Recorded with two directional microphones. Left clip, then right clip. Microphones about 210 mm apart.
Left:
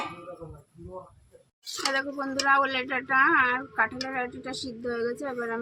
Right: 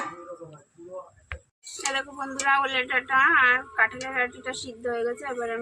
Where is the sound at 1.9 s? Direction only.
55° left (ahead or behind).